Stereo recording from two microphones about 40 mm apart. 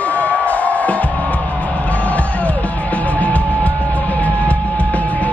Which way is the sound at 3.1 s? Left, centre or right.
Left.